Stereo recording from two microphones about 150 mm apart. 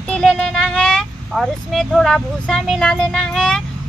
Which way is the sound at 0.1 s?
5° left (ahead or behind).